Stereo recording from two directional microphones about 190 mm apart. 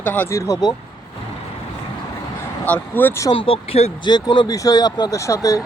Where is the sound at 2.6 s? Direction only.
10° left (ahead or behind).